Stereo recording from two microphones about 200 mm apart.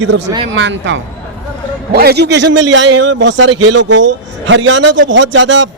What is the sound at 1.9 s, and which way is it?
A man's voice, 50° right (ahead or behind).